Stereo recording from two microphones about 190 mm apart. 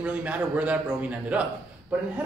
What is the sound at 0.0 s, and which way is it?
Speech, 5° right (ahead or behind).